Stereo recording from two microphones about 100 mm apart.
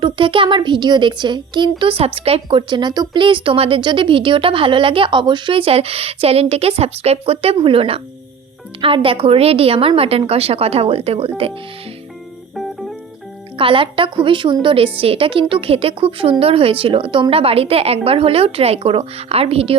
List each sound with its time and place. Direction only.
0.0 s speech: 60° right (ahead or behind); by 2.6 s 75° right (ahead or behind)
2.6 s a woman's voice: 50° right (ahead or behind); by 11.5 s 75° right (ahead or behind)
13.6 s speech: 60° right (ahead or behind)
15.0 s a woman's voice: 70° right (ahead or behind)